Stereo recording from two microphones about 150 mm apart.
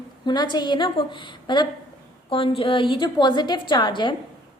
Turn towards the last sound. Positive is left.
turn(degrees=30)  # may be behind; listen again after turning